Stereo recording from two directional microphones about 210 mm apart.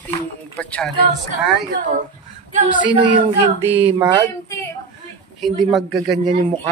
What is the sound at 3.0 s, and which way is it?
Speech, 25° right (ahead or behind).